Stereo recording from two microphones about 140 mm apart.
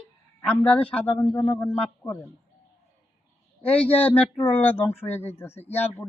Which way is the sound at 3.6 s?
10° left (ahead or behind).